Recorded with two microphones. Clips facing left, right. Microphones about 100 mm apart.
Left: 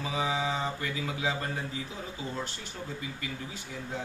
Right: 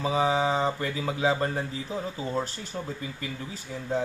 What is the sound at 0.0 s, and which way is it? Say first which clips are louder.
Speech: right 6 dB; 35° right (ahead or behind).